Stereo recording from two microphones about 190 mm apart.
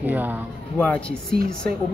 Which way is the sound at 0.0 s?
10° right (ahead or behind).